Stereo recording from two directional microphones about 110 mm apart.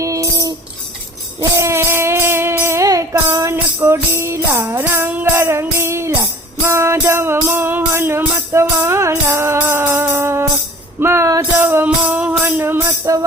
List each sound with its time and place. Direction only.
0.0 s music: 30° right (ahead or behind)